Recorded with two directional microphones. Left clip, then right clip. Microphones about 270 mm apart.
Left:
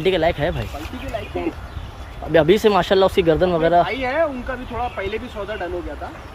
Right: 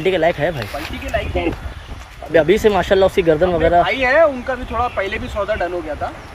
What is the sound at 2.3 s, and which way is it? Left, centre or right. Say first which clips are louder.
Speech: right 1 dB; centre.